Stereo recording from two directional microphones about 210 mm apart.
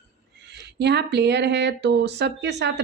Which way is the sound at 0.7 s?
50° right (ahead or behind).